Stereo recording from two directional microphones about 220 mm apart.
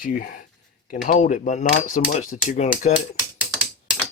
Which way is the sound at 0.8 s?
40° left (ahead or behind).